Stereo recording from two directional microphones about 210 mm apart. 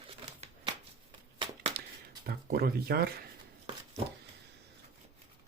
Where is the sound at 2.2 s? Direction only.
45° right (ahead or behind).